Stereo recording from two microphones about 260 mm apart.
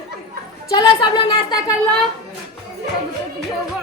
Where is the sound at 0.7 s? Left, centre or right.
Centre.